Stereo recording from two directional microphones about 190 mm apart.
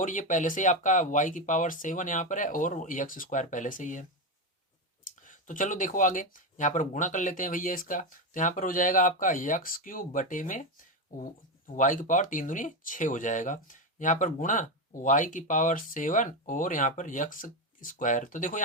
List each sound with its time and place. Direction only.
0.0 s speech: 45° left (ahead or behind)
5.2 s speech: 45° left (ahead or behind)